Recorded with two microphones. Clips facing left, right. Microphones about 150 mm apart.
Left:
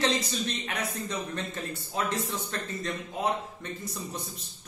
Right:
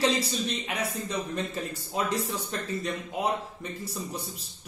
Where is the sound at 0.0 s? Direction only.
5° right (ahead or behind).